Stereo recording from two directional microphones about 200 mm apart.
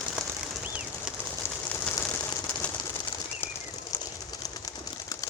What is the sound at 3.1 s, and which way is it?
Bird, 25° left (ahead or behind).